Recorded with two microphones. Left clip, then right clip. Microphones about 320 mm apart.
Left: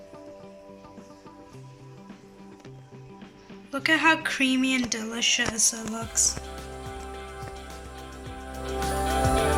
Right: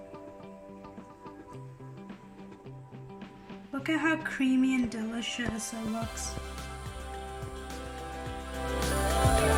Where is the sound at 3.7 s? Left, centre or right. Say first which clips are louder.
Left 8 dB; centre.